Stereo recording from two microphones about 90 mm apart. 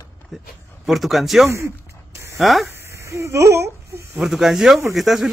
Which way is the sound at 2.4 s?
Centre (ahead or behind).